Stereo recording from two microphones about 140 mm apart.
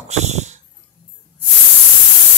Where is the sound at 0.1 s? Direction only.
55° right (ahead or behind).